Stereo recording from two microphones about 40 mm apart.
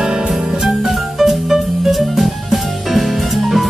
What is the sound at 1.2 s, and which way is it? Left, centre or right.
Music, centre.